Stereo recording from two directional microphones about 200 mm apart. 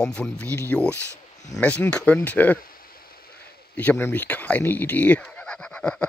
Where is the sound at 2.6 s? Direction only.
45° left (ahead or behind).